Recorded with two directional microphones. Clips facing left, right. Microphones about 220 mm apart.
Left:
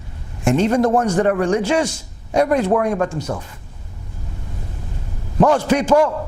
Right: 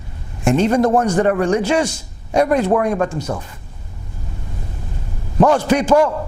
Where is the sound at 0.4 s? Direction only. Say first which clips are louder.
Right 1 dB; 15° right (ahead or behind).